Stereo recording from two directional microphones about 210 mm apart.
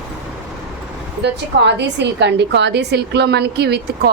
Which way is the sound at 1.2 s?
55° right (ahead or behind).